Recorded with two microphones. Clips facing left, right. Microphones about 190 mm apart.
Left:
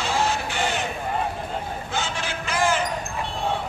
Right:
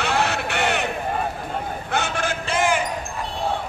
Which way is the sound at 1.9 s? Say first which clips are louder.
Right 7 dB; 60° right (ahead or behind).